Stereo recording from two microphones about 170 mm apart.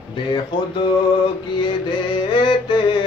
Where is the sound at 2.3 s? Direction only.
30° left (ahead or behind).